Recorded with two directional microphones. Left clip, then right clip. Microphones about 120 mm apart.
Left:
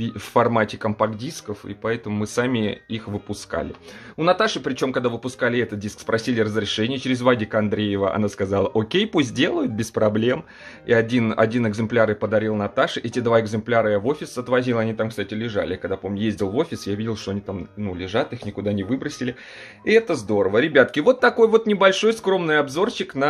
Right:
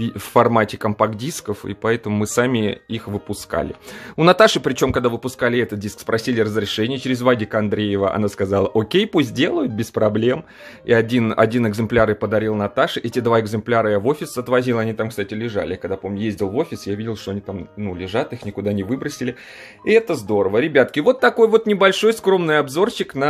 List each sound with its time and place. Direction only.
0.0 s speech: 45° right (ahead or behind)
1.9 s speech: 90° right; by 3.6 s 45° right (ahead or behind)
4.6 s speech: 80° right; by 10.4 s 30° right (ahead or behind)
10.9 s speech: 40° right (ahead or behind); by 17.4 s 5° right (ahead or behind)
17.8 s speech: 35° right (ahead or behind)
19.9 s speech: 30° right (ahead or behind)